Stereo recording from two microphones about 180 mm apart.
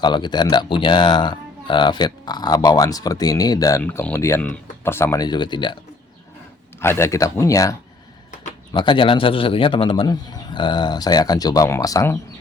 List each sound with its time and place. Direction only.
0.0 s speech: 25° left (ahead or behind)
6.7 s speech: 15° left (ahead or behind)